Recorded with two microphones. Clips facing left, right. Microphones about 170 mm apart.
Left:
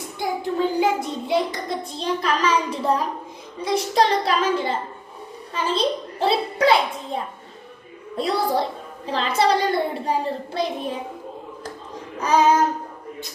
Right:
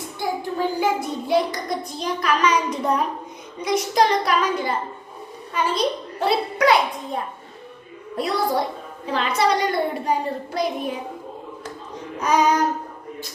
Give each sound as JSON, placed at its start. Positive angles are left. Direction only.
{"t": 0.2, "sound": "hands", "side_deg": 20}
{"t": 5.5, "sound": "a child's voice", "side_deg": 30}
{"t": 8.1, "sound": "a child's voice", "side_deg": 30}
{"t": 9.0, "sound": "hands", "side_deg": 30}
{"t": 12.2, "sound": "hands", "side_deg": 30}